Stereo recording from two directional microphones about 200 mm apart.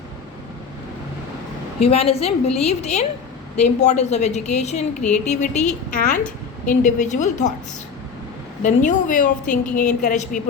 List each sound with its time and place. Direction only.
1.8 s a woman's voice: 30° left (ahead or behind)
8.6 s a woman's voice: 40° left (ahead or behind)